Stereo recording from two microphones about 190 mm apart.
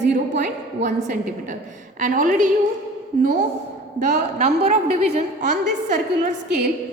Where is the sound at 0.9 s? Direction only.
40° right (ahead or behind).